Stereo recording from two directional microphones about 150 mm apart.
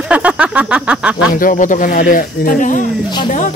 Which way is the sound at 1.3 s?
65° left (ahead or behind).